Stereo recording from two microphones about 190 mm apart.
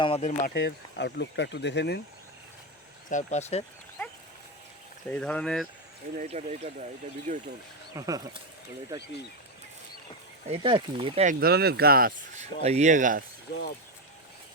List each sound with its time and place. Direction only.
0.0 s speech: 35° left (ahead or behind)
0.5 s speech: 65° left (ahead or behind)
3.1 s speech: 40° left (ahead or behind)
5.0 s speech: 10° left (ahead or behind)
6.1 s speech: 35° right (ahead or behind)
7.9 s speech: 20° right (ahead or behind)
10.4 s speech: 30° right (ahead or behind)
11.3 s speech: 55° right (ahead or behind)
12.6 s speech: 35° right (ahead or behind)
13.5 s speech: 60° left (ahead or behind)